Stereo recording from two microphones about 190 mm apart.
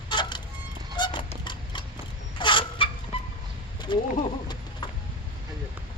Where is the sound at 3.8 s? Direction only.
25° left (ahead or behind).